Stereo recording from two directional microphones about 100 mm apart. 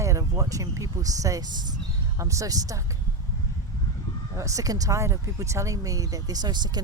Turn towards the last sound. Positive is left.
turn(degrees=-45)  # may be behind; listen again after turning